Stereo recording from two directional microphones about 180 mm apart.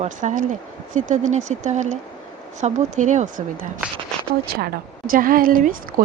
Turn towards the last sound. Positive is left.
turn(degrees=-50)  # may be behind; listen again after turning